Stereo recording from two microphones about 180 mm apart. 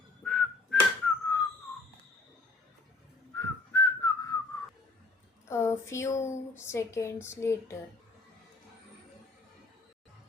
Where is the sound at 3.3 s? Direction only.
15° left (ahead or behind).